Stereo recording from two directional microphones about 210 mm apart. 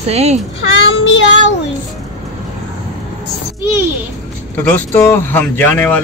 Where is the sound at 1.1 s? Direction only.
60° left (ahead or behind).